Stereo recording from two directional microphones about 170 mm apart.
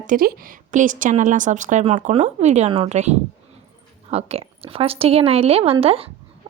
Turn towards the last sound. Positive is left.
turn(degrees=-35)  # may be behind; listen again after turning